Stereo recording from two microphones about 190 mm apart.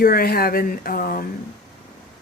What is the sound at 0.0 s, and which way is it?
Speech, 50° left (ahead or behind).